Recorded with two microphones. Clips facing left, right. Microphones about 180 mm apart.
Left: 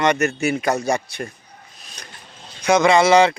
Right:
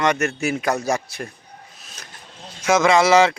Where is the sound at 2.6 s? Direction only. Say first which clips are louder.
Left 1 dB; centre (ahead or behind).